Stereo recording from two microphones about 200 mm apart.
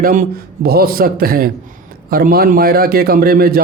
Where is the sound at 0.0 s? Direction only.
45° right (ahead or behind).